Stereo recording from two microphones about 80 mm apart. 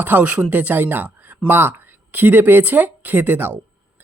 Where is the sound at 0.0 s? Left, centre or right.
Right.